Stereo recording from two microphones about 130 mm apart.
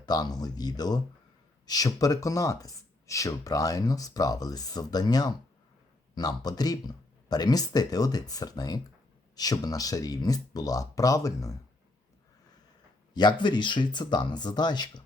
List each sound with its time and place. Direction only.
0.0 s speech: 30° left (ahead or behind)
13.1 s speech: 35° left (ahead or behind)